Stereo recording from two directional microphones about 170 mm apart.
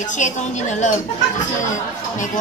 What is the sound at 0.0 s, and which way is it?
Speech, 45° left (ahead or behind).